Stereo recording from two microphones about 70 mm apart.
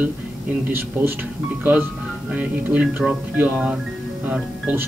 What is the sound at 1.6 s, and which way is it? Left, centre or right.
Speech, right.